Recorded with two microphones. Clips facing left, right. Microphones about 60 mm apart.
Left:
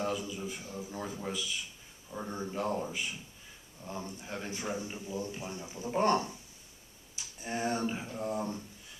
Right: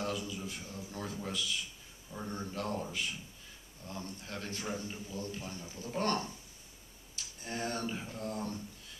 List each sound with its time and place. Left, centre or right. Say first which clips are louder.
0.0 s a man's voice: left 3 dB; centre